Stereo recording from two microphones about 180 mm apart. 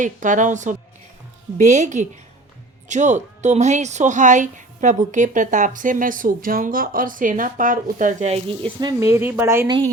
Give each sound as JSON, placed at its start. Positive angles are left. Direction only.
{"t": 0.0, "sound": "speech", "side_deg": -45}